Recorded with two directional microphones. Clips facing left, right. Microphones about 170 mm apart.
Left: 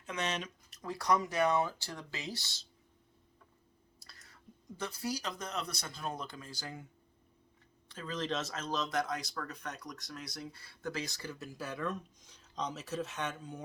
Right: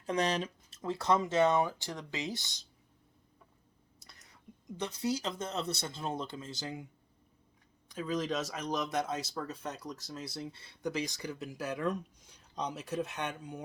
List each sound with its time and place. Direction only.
0.0 s speech: 35° right (ahead or behind); by 2.6 s 20° right (ahead or behind)
4.0 s whispering: 20° right (ahead or behind)
4.8 s speech: 20° right (ahead or behind)
7.9 s speech: 10° right (ahead or behind)